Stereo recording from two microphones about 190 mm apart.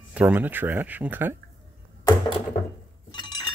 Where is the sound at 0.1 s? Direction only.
10° right (ahead or behind).